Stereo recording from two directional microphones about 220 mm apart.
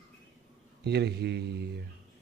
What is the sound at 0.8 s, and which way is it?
Speech, 50° right (ahead or behind).